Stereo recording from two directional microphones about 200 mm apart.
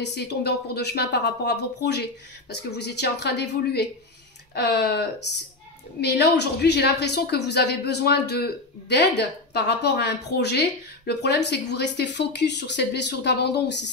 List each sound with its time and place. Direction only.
0.0 s speech: 55° left (ahead or behind)